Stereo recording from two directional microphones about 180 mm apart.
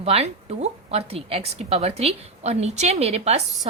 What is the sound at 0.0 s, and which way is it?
A woman's voice, 35° right (ahead or behind).